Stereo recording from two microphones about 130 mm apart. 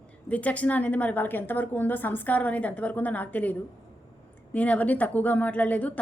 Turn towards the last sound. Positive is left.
turn(degrees=10)  # may be behind; listen again after turning